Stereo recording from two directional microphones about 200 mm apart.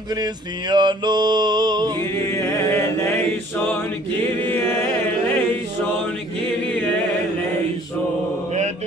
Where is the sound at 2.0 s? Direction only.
15° left (ahead or behind).